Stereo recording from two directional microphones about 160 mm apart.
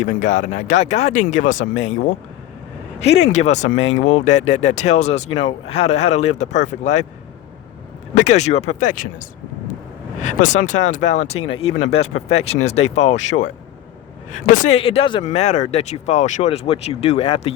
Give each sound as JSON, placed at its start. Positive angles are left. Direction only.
{"t": 0.0, "sound": "speech", "side_deg": 50}
{"t": 3.3, "sound": "speech", "side_deg": 45}
{"t": 8.1, "sound": "speech", "side_deg": 50}
{"t": 10.2, "sound": "speech", "side_deg": 50}
{"t": 14.8, "sound": "speech", "side_deg": 35}